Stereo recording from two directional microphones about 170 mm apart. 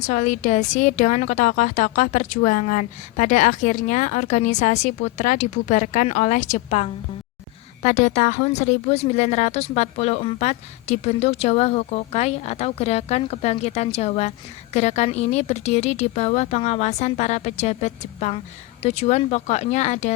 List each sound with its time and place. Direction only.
0.0 s a woman's voice: 45° left (ahead or behind)